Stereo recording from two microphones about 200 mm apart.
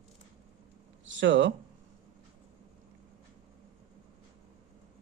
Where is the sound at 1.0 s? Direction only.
70° right (ahead or behind).